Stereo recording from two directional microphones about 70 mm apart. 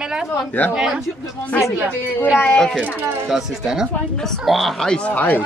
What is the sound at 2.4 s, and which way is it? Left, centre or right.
Speech, centre.